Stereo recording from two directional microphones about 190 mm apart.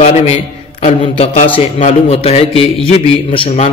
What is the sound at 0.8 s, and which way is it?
A man's voice, 40° left (ahead or behind).